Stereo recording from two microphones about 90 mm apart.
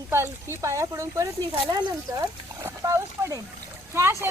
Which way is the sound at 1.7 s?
55° right (ahead or behind).